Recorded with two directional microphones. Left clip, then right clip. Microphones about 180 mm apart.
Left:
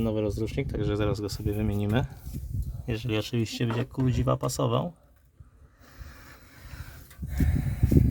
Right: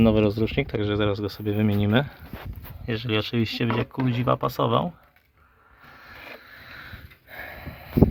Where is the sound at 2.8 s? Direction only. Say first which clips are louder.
Right 5 dB; 15° left (ahead or behind).